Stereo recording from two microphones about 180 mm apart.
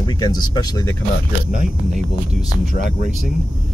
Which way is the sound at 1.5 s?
45° right (ahead or behind).